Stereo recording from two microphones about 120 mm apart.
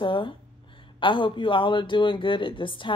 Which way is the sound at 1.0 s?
45° left (ahead or behind).